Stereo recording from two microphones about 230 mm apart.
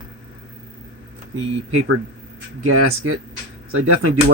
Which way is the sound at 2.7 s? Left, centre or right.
Right.